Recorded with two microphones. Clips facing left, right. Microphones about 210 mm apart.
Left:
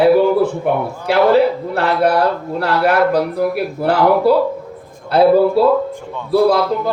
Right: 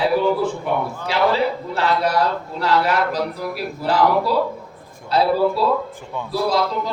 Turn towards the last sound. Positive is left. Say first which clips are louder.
# left 7 dB
turn(degrees=60)  # may be behind; listen again after turning